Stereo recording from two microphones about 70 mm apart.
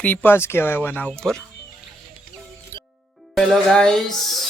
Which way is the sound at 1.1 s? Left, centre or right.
Centre.